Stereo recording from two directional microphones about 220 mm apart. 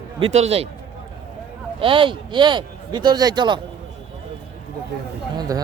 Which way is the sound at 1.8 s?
25° right (ahead or behind).